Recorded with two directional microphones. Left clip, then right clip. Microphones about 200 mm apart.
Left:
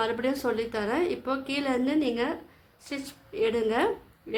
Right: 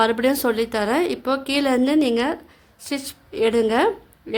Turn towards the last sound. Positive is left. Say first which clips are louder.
# right 7 dB
turn(degrees=-45)  # may be behind; listen again after turning